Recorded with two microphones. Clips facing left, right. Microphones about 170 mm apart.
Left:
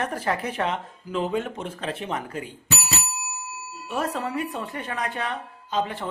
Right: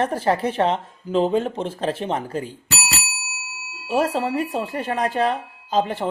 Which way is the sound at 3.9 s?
35° right (ahead or behind).